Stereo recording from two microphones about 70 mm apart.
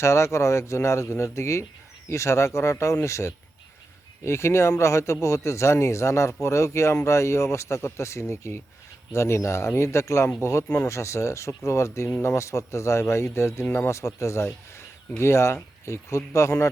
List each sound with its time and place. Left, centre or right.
0.0 s speech: left